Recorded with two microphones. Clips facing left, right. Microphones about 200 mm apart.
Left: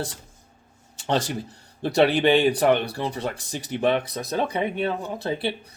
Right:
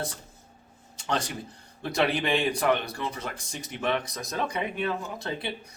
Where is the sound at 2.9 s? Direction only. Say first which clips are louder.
Left 6 dB; 30° left (ahead or behind).